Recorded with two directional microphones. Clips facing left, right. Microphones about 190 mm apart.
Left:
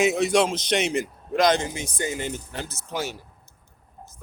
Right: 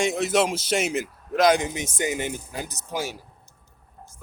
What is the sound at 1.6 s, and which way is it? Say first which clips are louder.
Speech: right 2 dB; 20° right (ahead or behind).